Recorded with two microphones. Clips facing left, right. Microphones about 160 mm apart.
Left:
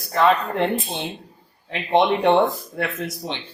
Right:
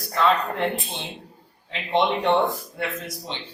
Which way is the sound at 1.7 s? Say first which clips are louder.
Left 4 dB; 55° left (ahead or behind).